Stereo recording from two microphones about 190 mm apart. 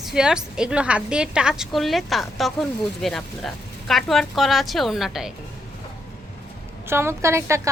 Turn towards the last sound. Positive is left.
turn(degrees=-15)  # may be behind; listen again after turning